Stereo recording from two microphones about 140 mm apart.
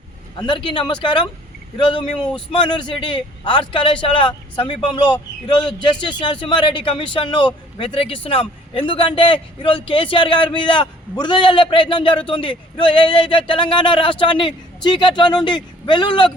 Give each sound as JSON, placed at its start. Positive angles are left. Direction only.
{"t": 0.3, "sound": "speech", "side_deg": 35}